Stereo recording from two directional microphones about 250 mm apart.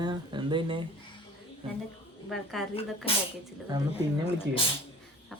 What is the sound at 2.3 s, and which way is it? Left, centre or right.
Speech, centre.